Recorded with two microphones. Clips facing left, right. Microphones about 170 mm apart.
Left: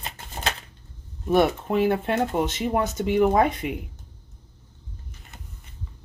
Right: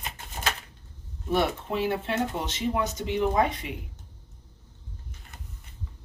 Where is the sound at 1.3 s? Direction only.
50° left (ahead or behind).